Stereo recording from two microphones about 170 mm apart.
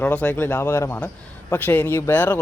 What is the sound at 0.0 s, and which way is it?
Speech, 10° left (ahead or behind).